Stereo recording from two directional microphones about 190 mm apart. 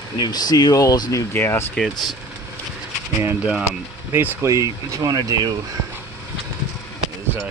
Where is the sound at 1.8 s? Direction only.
Centre (ahead or behind).